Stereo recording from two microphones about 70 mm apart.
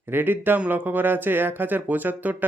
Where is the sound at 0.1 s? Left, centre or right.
Right.